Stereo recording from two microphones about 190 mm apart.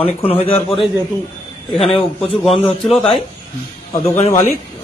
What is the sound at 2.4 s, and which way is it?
Speech, 30° left (ahead or behind).